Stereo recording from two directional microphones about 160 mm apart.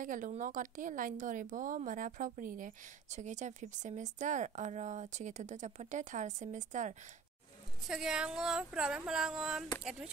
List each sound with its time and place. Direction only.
0.0 s a woman's voice: 55° right (ahead or behind)
7.9 s speech: 5° right (ahead or behind)